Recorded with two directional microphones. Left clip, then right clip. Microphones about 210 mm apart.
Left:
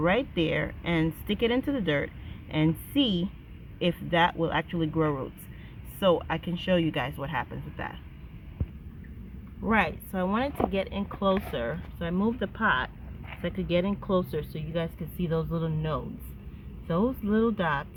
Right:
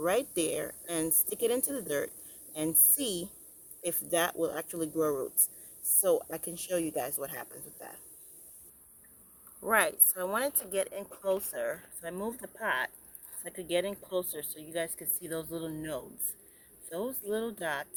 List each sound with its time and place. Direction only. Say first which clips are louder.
0.0 s speech: left 4 dB; 20° right (ahead or behind)
9.6 s speech: left 1 dB; 5° right (ahead or behind)